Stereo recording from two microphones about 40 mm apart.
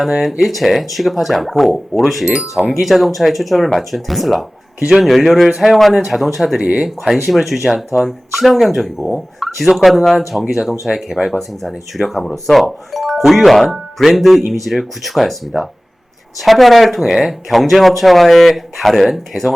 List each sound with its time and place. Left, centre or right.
0.0 s speech: centre
10.5 s speech: centre
19.3 s speech: right